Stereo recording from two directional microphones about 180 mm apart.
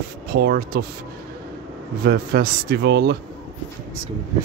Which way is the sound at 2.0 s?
60° right (ahead or behind).